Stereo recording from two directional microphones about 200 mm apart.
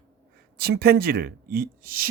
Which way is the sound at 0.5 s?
50° right (ahead or behind).